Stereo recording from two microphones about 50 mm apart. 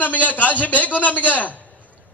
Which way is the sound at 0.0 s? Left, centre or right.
Left.